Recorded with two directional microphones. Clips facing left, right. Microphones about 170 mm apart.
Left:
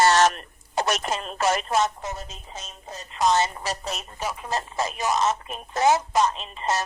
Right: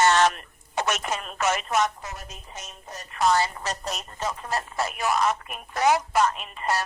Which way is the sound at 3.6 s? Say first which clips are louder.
Left 1 dB; 5° left (ahead or behind).